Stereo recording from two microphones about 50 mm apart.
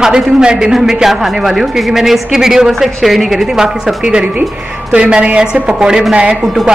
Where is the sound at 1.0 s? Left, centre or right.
Centre.